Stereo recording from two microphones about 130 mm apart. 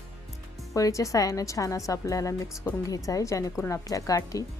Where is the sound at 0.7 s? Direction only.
25° left (ahead or behind).